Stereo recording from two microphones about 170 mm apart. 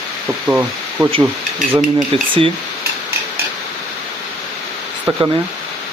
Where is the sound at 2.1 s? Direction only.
30° right (ahead or behind).